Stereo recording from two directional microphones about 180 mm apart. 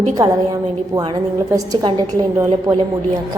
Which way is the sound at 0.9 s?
20° right (ahead or behind).